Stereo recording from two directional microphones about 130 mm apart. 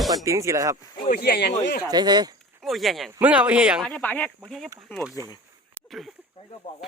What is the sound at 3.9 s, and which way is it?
Speech, 10° left (ahead or behind).